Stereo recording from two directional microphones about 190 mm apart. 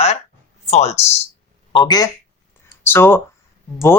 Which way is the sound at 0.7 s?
35° left (ahead or behind).